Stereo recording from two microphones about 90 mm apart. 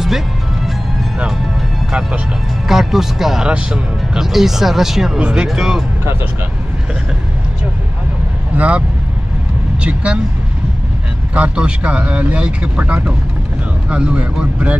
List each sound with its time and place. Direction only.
1.9 s speech: 10° right (ahead or behind)
8.5 s speech: 15° right (ahead or behind)
11.3 s speech: 15° right (ahead or behind)